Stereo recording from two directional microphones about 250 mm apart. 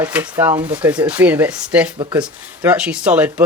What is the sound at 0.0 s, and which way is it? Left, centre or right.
Speech, centre.